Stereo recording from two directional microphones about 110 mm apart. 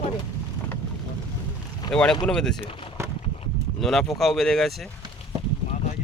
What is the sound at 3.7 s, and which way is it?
Speech, 5° left (ahead or behind).